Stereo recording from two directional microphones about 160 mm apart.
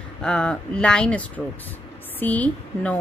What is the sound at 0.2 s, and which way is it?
A woman's voice, 5° left (ahead or behind).